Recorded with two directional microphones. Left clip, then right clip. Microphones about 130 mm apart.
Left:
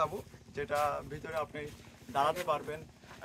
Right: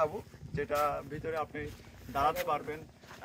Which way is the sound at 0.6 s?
25° left (ahead or behind).